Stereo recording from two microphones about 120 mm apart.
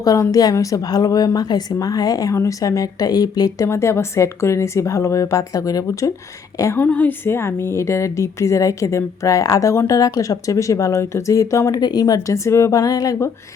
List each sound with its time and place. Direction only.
0.0 s a woman's voice: 30° left (ahead or behind)
6.7 s a woman's voice: 15° left (ahead or behind)